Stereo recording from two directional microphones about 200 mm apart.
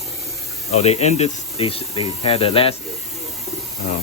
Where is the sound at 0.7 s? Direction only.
35° left (ahead or behind).